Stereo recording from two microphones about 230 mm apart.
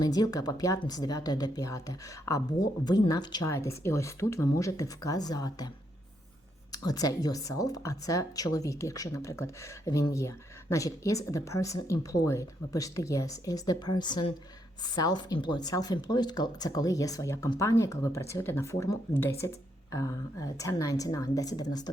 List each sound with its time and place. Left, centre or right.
0.0 s speech: centre